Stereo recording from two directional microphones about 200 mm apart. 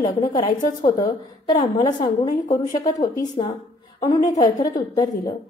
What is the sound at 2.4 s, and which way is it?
Speech, 40° left (ahead or behind).